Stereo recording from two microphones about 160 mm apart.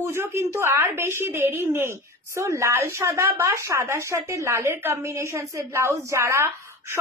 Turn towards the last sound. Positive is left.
turn(degrees=-15)  # may be behind; listen again after turning